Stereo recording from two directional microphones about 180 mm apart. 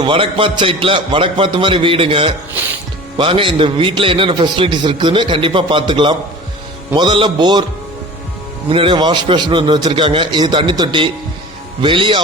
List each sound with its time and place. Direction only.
0.0 s a man's voice: 30° right (ahead or behind)
8.7 s a man's voice: 30° right (ahead or behind)